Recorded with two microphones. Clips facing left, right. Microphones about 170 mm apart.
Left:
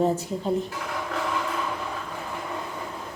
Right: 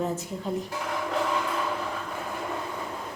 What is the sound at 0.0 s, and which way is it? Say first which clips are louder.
Speech: left 6 dB; 30° left (ahead or behind).